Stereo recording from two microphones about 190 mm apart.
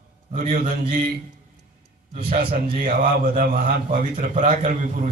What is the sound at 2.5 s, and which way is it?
A man's voice, 50° right (ahead or behind).